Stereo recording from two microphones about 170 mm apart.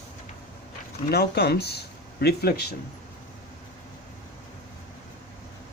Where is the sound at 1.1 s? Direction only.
70° left (ahead or behind).